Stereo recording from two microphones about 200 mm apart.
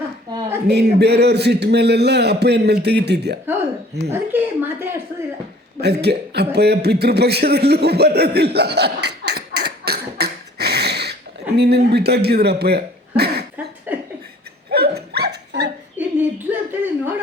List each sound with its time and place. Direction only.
0.3 s a sound: 20° right (ahead or behind)
0.7 s a man's voice: 55° right (ahead or behind)
4.1 s a woman's voice: 10° right (ahead or behind)
5.8 s a man's voice: 55° right (ahead or behind)
13.9 s laughter: 10° right (ahead or behind)
14.7 s hiccup: 55° right (ahead or behind)
16.0 s a sound: 10° right (ahead or behind)